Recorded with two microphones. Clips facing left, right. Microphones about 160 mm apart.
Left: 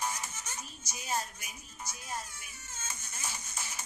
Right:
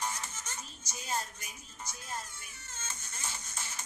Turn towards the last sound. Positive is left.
turn(degrees=10)  # may be behind; listen again after turning